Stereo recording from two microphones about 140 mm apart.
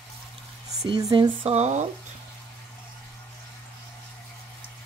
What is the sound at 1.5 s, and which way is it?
Speech, 55° right (ahead or behind).